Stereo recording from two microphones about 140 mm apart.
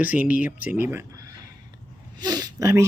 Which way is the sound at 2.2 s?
30° right (ahead or behind).